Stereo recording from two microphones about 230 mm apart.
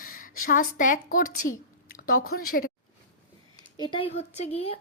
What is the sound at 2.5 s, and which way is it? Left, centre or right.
Speech, left.